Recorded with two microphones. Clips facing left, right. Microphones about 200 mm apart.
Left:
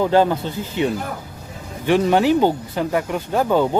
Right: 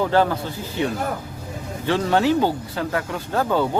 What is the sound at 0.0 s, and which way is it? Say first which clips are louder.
Speech: left 3 dB; 15° left (ahead or behind).